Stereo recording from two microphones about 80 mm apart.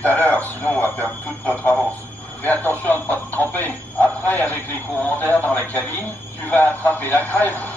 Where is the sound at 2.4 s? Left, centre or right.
Left.